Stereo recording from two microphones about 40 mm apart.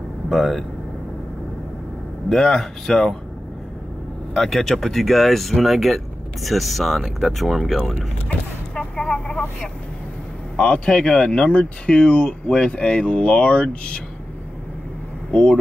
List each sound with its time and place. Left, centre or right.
0.3 s speech: centre
2.2 s speech: centre
4.3 s speech: centre
8.7 s a sound: centre
10.5 s speech: left
15.3 s speech: left